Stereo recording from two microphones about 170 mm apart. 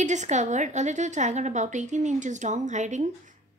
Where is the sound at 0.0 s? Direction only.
45° right (ahead or behind).